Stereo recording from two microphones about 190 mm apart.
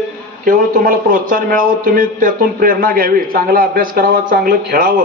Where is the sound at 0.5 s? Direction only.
45° right (ahead or behind).